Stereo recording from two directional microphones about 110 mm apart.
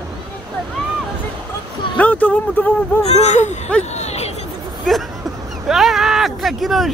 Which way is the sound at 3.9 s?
80° left.